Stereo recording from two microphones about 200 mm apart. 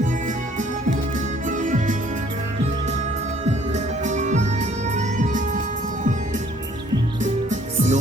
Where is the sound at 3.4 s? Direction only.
35° right (ahead or behind).